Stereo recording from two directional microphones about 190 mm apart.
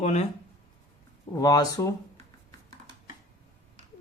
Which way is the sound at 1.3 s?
20° left (ahead or behind).